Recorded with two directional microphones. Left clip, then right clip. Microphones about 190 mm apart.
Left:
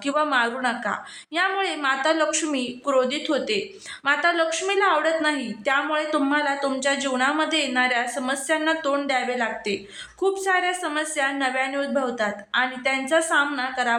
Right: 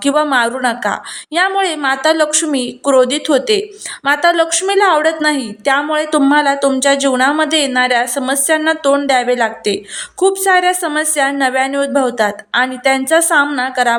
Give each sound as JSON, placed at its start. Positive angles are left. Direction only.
{"t": 0.0, "sound": "a woman's voice", "side_deg": -35}